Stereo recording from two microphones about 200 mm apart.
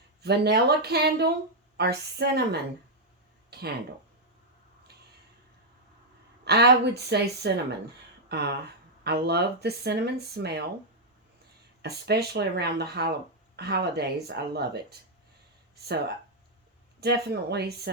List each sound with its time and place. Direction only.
0.2 s speech: 55° right (ahead or behind)
6.4 s speech: 55° right (ahead or behind)
11.8 s speech: 55° right (ahead or behind)
17.0 s speech: 55° right (ahead or behind)